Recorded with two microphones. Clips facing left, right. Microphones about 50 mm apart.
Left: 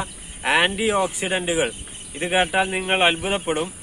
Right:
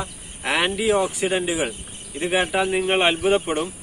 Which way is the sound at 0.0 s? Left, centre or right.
Centre.